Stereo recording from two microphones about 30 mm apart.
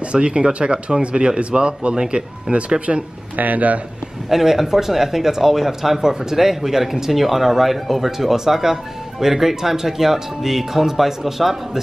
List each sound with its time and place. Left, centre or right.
0.0 s speech: right
3.3 s speech: right
4.3 s speech: centre